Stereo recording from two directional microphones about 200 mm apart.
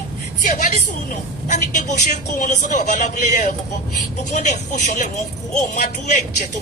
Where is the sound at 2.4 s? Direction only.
40° left (ahead or behind).